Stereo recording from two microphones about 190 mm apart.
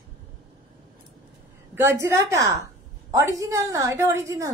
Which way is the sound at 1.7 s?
15° right (ahead or behind).